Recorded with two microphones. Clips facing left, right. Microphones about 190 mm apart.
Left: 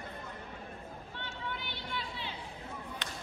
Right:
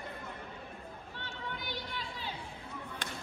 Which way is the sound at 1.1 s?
40° right (ahead or behind).